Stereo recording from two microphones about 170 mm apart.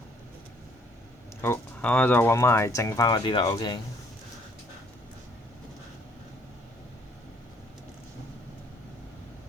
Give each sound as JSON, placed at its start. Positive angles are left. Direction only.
{"t": 1.4, "sound": "speech", "side_deg": 10}